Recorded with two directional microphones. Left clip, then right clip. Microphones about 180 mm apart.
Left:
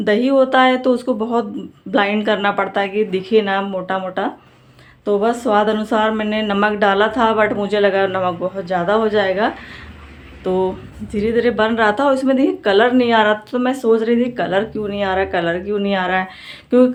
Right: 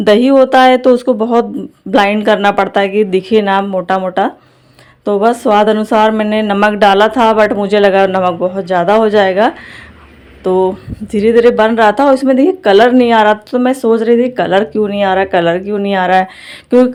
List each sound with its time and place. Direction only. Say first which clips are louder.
0.0 s speech: right 7 dB; 45° right (ahead or behind)